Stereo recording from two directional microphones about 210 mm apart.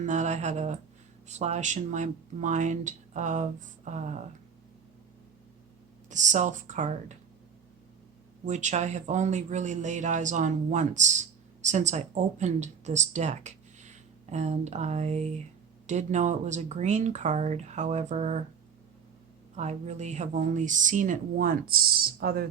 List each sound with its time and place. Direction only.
0.0 s speech: 35° right (ahead or behind)
6.1 s speech: 35° right (ahead or behind)
8.4 s speech: 35° right (ahead or behind)
19.5 s speech: 35° right (ahead or behind)